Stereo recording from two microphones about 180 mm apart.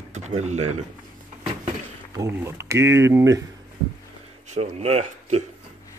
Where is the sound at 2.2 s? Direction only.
15° right (ahead or behind).